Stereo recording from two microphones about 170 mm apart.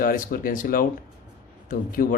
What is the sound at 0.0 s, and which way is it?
Speech, 55° left (ahead or behind).